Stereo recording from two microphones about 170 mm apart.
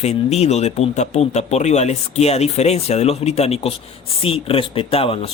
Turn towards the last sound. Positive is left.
turn(degrees=35)  # may be behind; listen again after turning